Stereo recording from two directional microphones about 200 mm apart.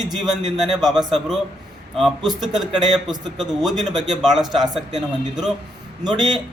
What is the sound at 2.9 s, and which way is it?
Speech, 20° right (ahead or behind).